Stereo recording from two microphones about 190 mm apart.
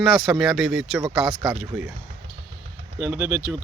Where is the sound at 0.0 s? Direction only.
Centre (ahead or behind).